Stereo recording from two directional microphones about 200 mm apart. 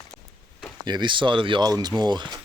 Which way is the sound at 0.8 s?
20° right (ahead or behind).